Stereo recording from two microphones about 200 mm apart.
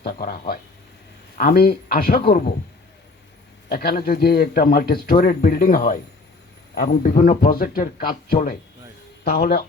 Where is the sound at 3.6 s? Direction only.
50° left (ahead or behind).